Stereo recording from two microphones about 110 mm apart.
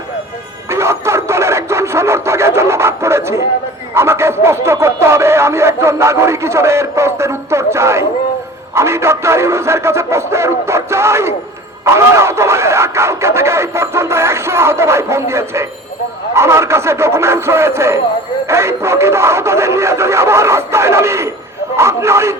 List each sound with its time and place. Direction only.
0.7 s radio: 25° right (ahead or behind)
3.9 s speech: 25° right (ahead or behind)